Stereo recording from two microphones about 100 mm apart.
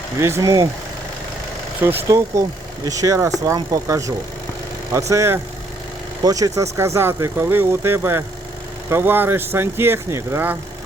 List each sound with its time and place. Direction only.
0.2 s speech: 30° right (ahead or behind)
1.8 s speech: 20° right (ahead or behind)
2.0 s speech: 30° right (ahead or behind)